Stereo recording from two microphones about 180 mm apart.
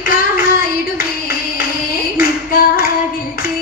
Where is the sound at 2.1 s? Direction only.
55° left (ahead or behind).